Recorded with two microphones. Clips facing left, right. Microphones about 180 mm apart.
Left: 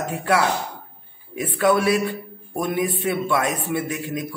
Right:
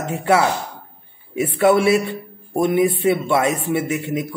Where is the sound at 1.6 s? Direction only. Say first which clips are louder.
Right 3 dB; 25° right (ahead or behind).